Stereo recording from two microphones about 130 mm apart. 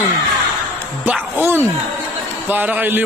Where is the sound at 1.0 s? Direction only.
15° right (ahead or behind).